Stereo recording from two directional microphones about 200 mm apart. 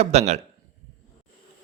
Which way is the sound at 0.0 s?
35° right (ahead or behind).